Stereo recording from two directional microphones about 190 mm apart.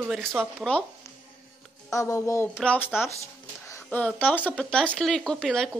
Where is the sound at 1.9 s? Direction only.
15° left (ahead or behind).